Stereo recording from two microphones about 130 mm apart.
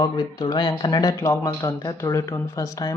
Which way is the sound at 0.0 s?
30° left (ahead or behind).